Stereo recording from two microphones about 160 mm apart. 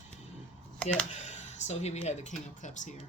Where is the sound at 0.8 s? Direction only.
5° left (ahead or behind).